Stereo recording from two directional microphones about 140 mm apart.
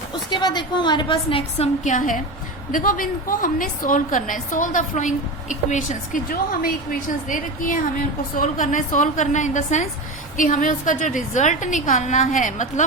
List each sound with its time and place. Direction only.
0.3 s a woman's voice: 30° left (ahead or behind); by 9.8 s 60° left (ahead or behind)
10.3 s a woman's voice: 70° left (ahead or behind)